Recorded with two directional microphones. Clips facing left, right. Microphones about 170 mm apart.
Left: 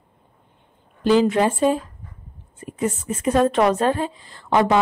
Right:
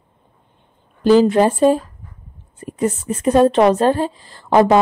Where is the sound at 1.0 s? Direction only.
40° right (ahead or behind).